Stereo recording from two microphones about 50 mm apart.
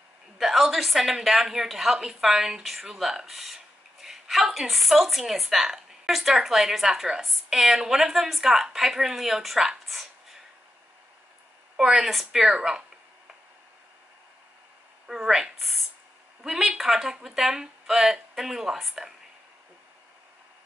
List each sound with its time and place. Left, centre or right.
0.4 s a woman's voice: centre
11.7 s speech: centre
15.0 s speech: centre